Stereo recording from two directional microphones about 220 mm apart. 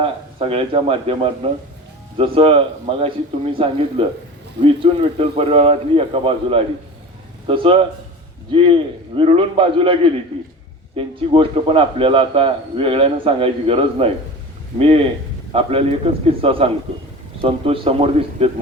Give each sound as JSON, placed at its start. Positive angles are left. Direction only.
{"t": 0.0, "sound": "a man's voice", "side_deg": -25}